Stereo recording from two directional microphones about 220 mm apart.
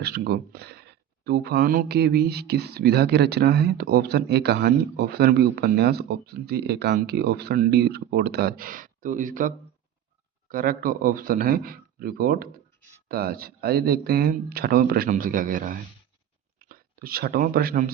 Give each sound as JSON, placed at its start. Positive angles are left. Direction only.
{"t": 0.0, "sound": "speech", "side_deg": -45}
{"t": 10.5, "sound": "speech", "side_deg": -40}